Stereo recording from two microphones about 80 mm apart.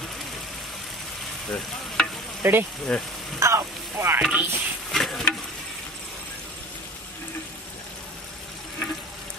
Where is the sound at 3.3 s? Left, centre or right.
Right.